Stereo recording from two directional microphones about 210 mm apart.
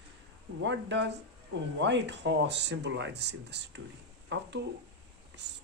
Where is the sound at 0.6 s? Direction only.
60° right (ahead or behind).